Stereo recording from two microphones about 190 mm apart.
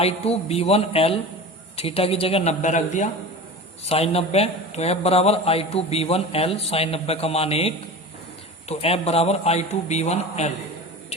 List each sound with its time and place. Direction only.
0.0 s a man's voice: 30° left (ahead or behind)
8.7 s a man's voice: 30° left (ahead or behind)